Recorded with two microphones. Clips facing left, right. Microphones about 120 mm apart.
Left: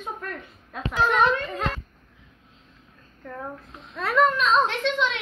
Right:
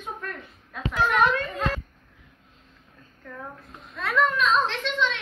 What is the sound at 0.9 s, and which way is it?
Speech, 30° left (ahead or behind).